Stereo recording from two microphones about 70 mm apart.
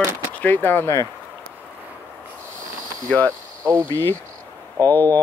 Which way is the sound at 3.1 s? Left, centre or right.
Left.